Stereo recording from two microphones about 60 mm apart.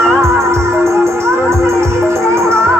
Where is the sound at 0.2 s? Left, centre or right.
Right.